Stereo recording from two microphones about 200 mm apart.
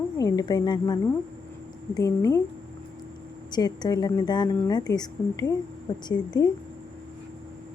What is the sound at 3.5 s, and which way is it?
A woman's voice, 20° left (ahead or behind).